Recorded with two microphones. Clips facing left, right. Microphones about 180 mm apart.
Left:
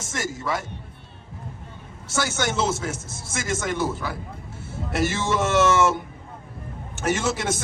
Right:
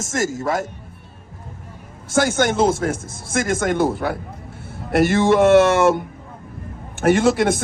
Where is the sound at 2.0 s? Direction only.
50° right (ahead or behind).